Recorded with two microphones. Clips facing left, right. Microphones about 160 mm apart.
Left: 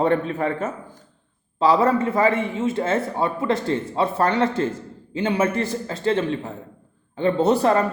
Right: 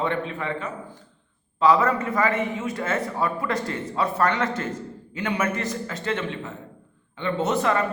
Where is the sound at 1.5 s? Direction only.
30° left (ahead or behind).